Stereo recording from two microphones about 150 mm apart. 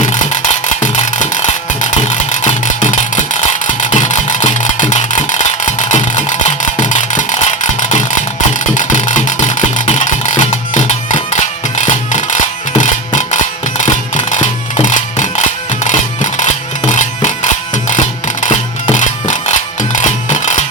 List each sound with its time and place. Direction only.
0.0 s music: 55° left (ahead or behind)